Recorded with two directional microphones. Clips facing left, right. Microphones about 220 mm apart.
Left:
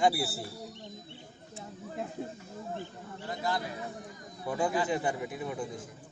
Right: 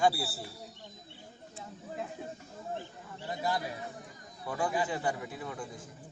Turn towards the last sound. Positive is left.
turn(degrees=20)  # may be behind; listen again after turning